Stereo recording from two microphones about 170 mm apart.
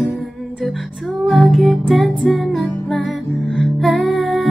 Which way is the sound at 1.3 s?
Centre (ahead or behind).